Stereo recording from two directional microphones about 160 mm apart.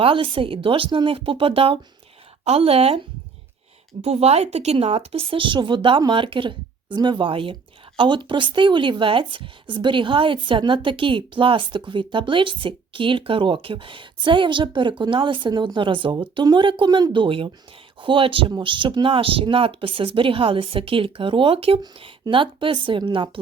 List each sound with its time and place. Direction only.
0.0 s speech: 35° right (ahead or behind)
4.0 s speech: 40° right (ahead or behind)